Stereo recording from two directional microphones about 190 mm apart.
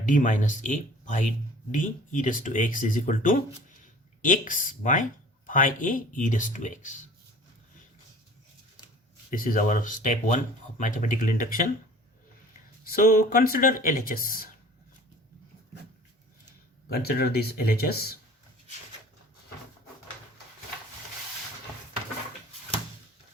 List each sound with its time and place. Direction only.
0.0 s speech: 45° left (ahead or behind)
9.3 s speech: 45° left (ahead or behind)
12.8 s speech: 50° left (ahead or behind)
16.9 s speech: 55° left (ahead or behind)